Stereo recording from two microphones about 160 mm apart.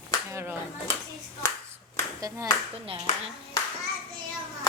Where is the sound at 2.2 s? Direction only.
20° right (ahead or behind).